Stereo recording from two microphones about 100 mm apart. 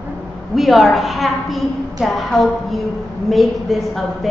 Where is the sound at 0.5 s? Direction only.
Centre (ahead or behind).